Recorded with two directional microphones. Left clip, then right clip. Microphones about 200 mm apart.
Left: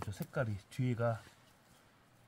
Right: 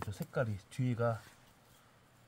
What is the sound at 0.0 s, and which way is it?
Speech, 5° left (ahead or behind).